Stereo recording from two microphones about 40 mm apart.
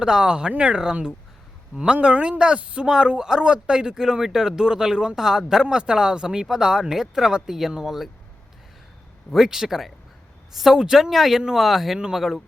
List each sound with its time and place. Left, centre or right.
0.0 s speech: right
2.1 s speech: right
2.4 s speech: right
7.9 s speech: centre
9.3 s speech: centre